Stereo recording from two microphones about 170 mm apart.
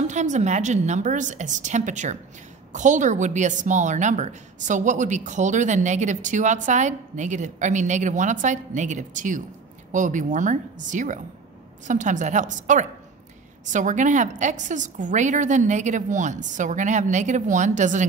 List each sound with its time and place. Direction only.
0.0 s a woman's voice: 45° right (ahead or behind)